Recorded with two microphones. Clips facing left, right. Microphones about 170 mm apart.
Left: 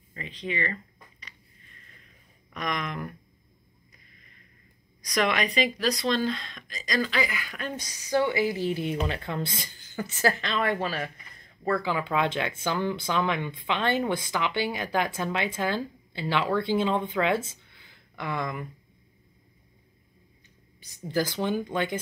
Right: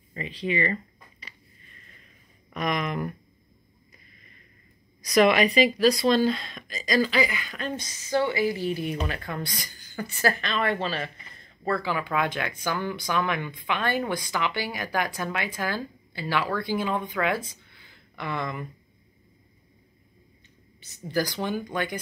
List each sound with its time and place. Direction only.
0.1 s speech: 10° right (ahead or behind)
2.5 s speech: 10° right (ahead or behind)
5.0 s speech: 5° right (ahead or behind); by 17.4 s 25° left (ahead or behind)
17.7 s a sound: 15° left (ahead or behind)
20.8 s speech: 15° left (ahead or behind)